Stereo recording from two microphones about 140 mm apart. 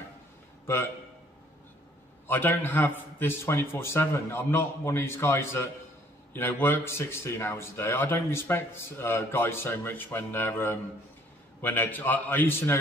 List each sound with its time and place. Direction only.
2.2 s a man's voice: 15° left (ahead or behind)